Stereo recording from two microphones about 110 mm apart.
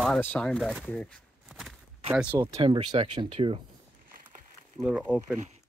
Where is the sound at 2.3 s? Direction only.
25° right (ahead or behind).